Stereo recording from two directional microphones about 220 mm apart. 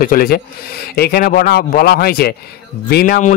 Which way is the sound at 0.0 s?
40° left (ahead or behind).